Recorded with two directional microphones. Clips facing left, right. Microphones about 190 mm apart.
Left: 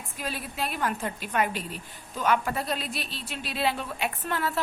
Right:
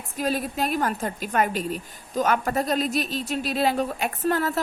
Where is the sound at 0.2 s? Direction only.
40° right (ahead or behind).